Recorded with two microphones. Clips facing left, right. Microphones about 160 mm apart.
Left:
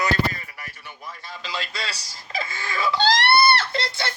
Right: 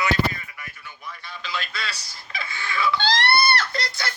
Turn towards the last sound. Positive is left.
turn(degrees=30)  # may be behind; listen again after turning